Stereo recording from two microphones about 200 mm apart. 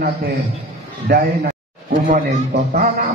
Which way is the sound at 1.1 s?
50° right (ahead or behind).